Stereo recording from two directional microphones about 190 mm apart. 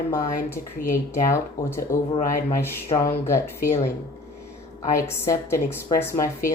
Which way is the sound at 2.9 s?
25° left (ahead or behind).